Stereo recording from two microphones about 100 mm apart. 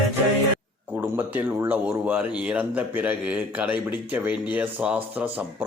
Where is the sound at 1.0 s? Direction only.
15° right (ahead or behind).